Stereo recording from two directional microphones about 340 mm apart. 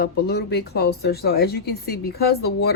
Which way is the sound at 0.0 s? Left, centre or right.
Left.